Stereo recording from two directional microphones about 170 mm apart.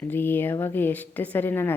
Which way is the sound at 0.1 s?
10° left (ahead or behind).